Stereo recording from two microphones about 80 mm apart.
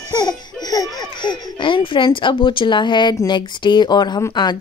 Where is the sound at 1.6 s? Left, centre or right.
Left.